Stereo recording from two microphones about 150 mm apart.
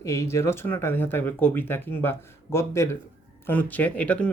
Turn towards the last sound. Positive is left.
turn(degrees=10)  # may be behind; listen again after turning